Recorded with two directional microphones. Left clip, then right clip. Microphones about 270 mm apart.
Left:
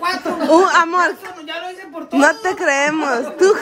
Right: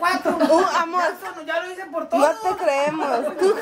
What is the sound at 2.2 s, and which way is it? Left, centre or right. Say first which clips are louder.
Speech: left 8 dB; left.